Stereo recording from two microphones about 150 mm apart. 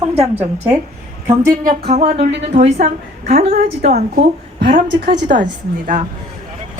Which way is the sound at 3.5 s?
85° right.